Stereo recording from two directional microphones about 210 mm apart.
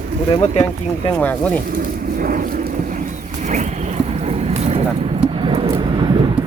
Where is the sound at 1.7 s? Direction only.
45° right (ahead or behind).